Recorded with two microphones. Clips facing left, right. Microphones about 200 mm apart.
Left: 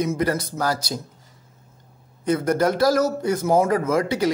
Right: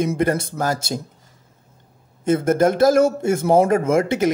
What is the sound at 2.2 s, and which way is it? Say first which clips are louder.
Speech: right 3 dB; 25° right (ahead or behind).